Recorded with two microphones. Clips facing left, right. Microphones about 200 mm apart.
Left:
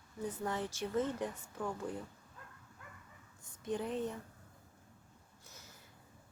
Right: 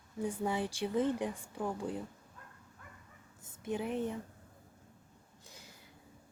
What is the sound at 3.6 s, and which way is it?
Speech, 10° right (ahead or behind).